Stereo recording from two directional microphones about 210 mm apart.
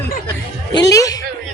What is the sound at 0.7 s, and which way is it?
Speech, 15° left (ahead or behind).